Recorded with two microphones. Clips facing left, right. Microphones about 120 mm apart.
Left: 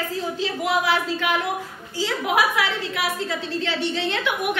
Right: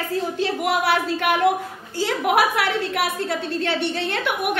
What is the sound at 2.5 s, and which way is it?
A woman's voice, 60° right (ahead or behind).